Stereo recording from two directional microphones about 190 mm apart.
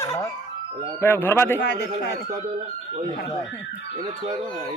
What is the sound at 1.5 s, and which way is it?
Speech, 65° left (ahead or behind).